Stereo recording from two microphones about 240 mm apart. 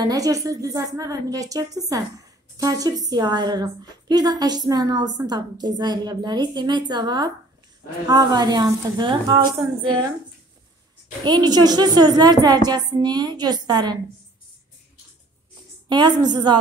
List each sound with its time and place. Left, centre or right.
0.0 s a woman's voice: centre
11.2 s a woman's voice: centre
15.9 s a woman's voice: centre